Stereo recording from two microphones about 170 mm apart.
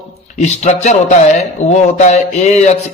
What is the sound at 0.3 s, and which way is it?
Speech, 40° left (ahead or behind).